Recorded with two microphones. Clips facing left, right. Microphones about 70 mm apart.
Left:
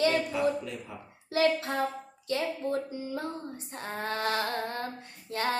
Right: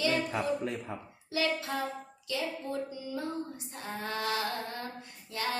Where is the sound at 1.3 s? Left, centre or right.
Left.